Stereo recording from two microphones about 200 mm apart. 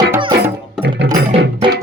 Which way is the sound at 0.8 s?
60° right (ahead or behind).